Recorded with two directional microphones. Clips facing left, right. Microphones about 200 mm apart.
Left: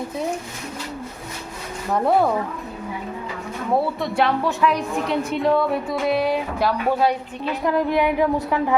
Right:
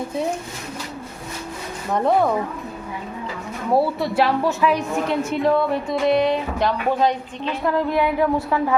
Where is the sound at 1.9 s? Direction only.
5° left (ahead or behind).